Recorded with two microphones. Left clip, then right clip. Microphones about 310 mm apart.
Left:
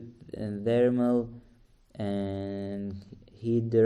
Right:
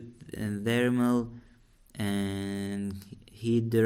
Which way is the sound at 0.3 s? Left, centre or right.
Right.